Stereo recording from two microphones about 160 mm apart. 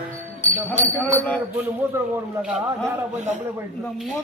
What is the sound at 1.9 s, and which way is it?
Speech, 15° right (ahead or behind).